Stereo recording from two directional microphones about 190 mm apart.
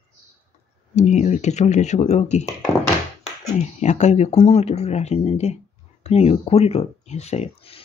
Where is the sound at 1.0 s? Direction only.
35° left (ahead or behind).